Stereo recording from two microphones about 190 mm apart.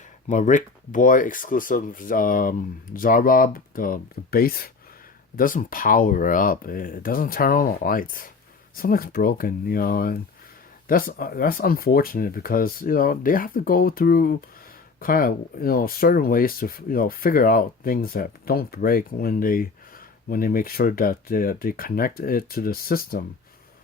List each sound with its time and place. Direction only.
0.3 s speech: 40° left (ahead or behind)